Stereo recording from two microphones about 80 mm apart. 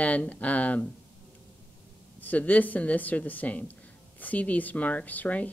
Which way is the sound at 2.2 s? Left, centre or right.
Left.